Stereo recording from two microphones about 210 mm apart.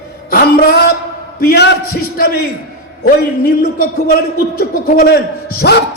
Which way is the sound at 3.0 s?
45° left (ahead or behind).